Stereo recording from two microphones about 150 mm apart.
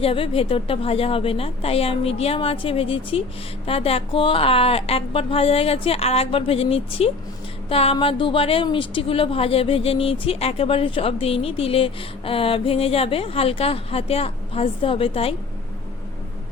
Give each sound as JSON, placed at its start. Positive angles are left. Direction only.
{"t": 0.0, "sound": "a woman's voice", "side_deg": 40}